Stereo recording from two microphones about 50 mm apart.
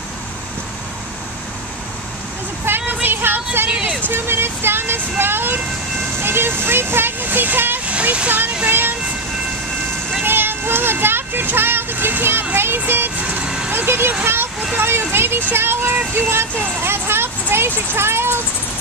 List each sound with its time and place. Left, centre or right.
2.6 s vehicle: right
4.1 s speech: right
7.8 s vehicle: right
8.6 s speech: right
10.2 s a sound: right
12.5 s speech: right
13.4 s vehicle: centre
13.7 s speech: right